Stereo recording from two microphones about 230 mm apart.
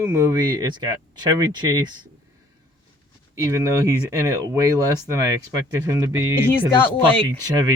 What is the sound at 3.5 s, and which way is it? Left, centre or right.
Speech, centre.